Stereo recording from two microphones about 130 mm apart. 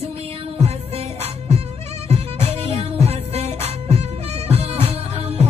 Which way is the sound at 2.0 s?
55° right (ahead or behind).